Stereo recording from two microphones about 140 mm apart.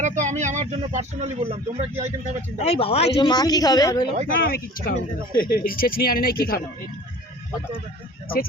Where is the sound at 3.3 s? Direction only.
30° left (ahead or behind).